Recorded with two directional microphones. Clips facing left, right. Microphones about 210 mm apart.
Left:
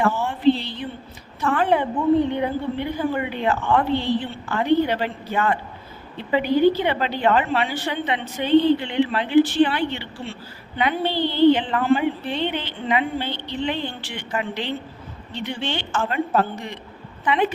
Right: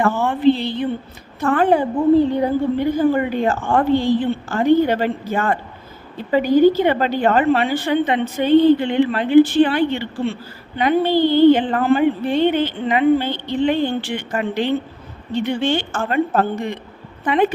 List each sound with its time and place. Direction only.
0.0 s a woman's voice: 60° right (ahead or behind); by 1.9 s 45° right (ahead or behind)
2.0 s a woman's voice: 30° right (ahead or behind); by 17.5 s 50° right (ahead or behind)